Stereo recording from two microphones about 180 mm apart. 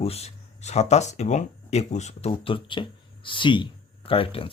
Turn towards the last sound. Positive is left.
turn(degrees=30)  # may be behind; listen again after turning